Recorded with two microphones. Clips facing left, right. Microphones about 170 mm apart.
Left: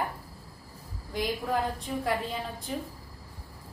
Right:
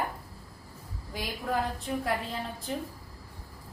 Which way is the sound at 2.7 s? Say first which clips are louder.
Right 1 dB; centre (ahead or behind).